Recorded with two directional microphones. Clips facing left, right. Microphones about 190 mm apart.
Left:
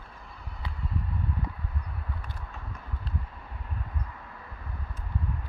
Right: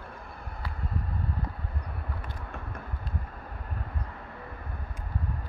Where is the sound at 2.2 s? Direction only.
55° right (ahead or behind).